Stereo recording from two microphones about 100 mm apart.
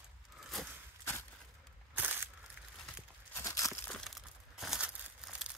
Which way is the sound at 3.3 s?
35° left (ahead or behind).